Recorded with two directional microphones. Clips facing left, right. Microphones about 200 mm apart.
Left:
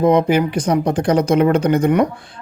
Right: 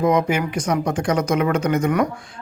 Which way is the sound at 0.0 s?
30° left (ahead or behind).